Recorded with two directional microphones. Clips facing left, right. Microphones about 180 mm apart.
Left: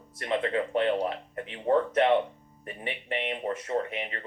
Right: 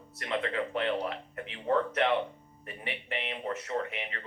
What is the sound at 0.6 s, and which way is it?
Speech, 30° left (ahead or behind).